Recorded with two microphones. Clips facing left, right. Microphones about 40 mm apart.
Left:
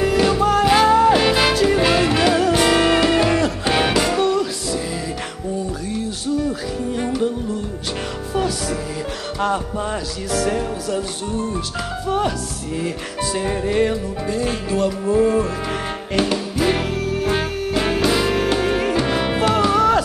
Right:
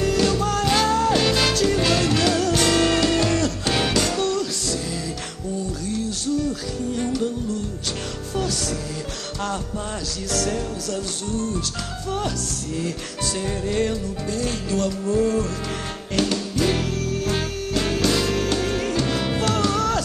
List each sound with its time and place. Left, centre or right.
0.0 s music: centre
5.9 s music: centre
8.4 s music: centre
10.3 s music: centre
12.7 s music: centre